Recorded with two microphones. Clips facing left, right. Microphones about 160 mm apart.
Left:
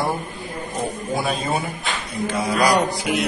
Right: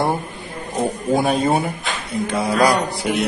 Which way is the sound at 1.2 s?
60° right (ahead or behind).